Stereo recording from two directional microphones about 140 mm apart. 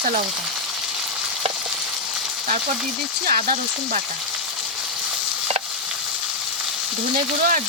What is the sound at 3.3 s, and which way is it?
Speech, 80° right.